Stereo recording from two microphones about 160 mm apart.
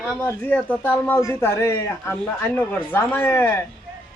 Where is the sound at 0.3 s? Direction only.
10° left (ahead or behind).